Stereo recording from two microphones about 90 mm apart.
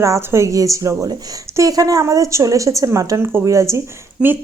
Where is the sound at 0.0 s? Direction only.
30° right (ahead or behind).